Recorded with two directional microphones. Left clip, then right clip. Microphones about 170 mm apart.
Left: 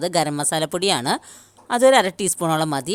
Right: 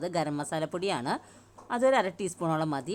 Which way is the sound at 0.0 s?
40° left (ahead or behind).